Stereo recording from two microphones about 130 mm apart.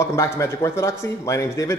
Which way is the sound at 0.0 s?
20° left (ahead or behind).